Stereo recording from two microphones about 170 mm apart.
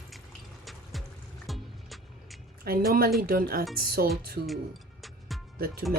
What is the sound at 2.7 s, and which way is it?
Speech, 60° right (ahead or behind).